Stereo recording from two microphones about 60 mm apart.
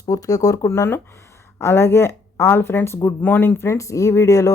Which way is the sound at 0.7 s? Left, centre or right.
Left.